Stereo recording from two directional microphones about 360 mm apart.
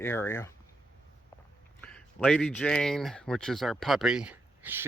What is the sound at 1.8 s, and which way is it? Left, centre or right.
Speech, centre.